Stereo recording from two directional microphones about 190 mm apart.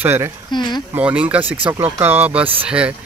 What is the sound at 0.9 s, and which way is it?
Speech, 10° right (ahead or behind).